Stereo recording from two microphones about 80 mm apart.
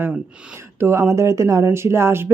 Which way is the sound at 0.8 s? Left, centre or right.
Right.